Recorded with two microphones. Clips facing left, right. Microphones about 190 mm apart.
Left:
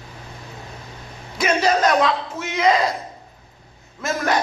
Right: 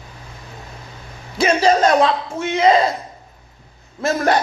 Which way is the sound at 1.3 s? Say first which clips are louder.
Right 4 dB; 30° right (ahead or behind).